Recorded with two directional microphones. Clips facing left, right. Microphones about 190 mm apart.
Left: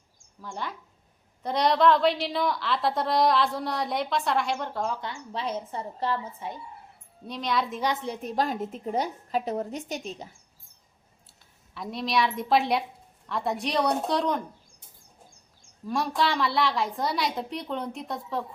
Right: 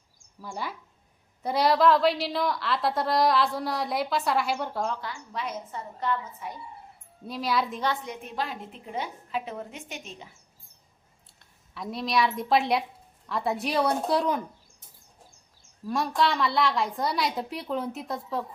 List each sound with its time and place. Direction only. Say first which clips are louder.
0.4 s a woman's voice: even; 10° right (ahead or behind)
4.9 s a woman's voice: left 1 dB; 25° left (ahead or behind)
7.3 s a woman's voice: right 1 dB; 5° right (ahead or behind)
8.0 s a woman's voice: left 5 dB; 35° left (ahead or behind)
11.3 s a woman's voice: even; centre (ahead or behind)
15.9 s a woman's voice: right 1 dB; centre (ahead or behind)